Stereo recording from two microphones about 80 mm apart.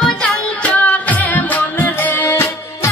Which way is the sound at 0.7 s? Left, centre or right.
Centre.